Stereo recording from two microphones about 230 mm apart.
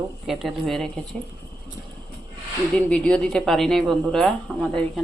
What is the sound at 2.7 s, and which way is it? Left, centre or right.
Speech, centre.